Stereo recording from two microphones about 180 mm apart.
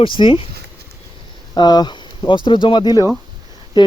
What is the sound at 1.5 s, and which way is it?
Speech, 20° left (ahead or behind).